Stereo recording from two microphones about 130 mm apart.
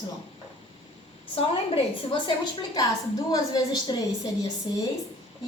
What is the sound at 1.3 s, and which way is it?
Speech, 50° left (ahead or behind).